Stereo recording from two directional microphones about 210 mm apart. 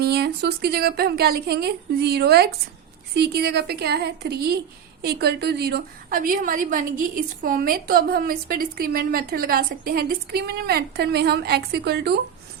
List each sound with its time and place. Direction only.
0.0 s a woman's voice: 50° right (ahead or behind)